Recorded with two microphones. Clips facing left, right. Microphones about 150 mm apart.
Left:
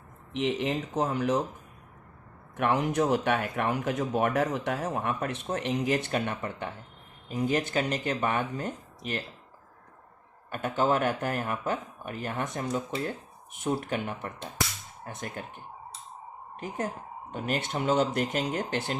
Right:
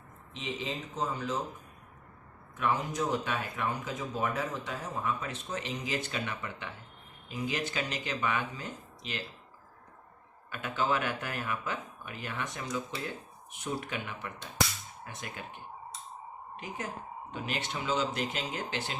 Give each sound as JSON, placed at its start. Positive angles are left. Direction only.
{"t": 0.3, "sound": "speech", "side_deg": 70}
{"t": 2.6, "sound": "speech", "side_deg": 75}
{"t": 10.5, "sound": "speech", "side_deg": 45}